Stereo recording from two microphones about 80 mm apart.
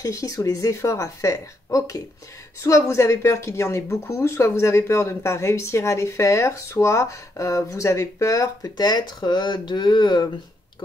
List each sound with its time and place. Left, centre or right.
0.0 s speech: left